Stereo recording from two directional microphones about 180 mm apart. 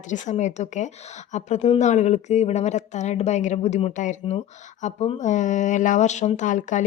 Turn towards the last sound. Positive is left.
turn(degrees=45)  # may be behind; listen again after turning